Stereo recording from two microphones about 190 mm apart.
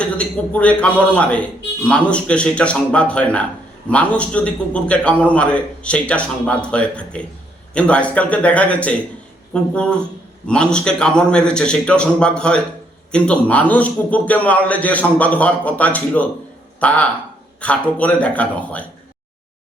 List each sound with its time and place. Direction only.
0.0 s a man's voice: 5° left (ahead or behind)